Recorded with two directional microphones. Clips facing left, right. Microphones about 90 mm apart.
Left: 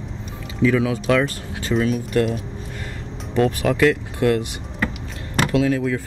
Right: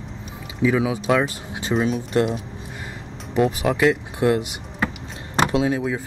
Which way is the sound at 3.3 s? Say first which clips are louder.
Left 1 dB; 10° right (ahead or behind).